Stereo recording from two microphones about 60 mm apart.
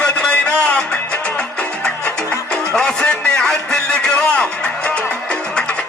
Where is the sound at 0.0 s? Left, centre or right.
Left.